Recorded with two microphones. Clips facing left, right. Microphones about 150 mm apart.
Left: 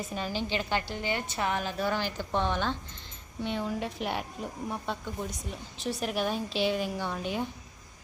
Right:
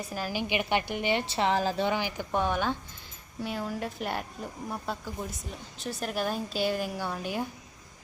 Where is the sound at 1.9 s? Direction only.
15° right (ahead or behind).